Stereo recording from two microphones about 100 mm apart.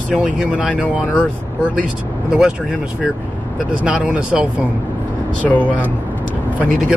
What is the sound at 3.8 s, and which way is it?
Speech, 10° right (ahead or behind).